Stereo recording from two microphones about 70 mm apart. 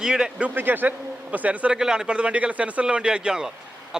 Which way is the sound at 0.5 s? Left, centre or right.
Right.